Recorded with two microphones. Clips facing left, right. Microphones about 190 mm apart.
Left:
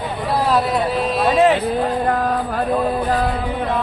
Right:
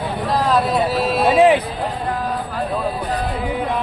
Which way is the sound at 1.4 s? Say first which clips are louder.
Right 2 dB; 15° right (ahead or behind).